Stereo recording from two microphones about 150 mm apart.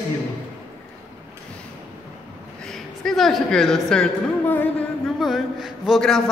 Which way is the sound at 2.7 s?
Centre (ahead or behind).